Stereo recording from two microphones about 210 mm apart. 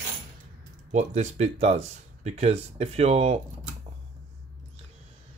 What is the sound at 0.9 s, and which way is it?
Speech, 30° right (ahead or behind).